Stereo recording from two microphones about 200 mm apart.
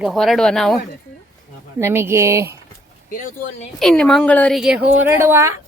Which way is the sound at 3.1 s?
40° left (ahead or behind).